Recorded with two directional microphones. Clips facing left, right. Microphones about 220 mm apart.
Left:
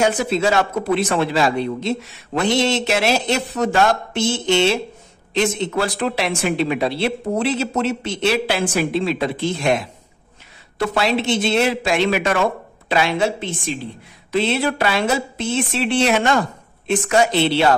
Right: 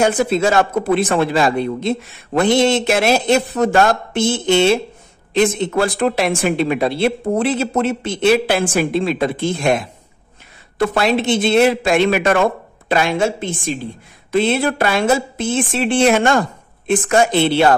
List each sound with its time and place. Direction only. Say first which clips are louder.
0.0 s speech: right 3 dB; 50° right (ahead or behind)
10.8 s speech: right 3 dB; 50° right (ahead or behind)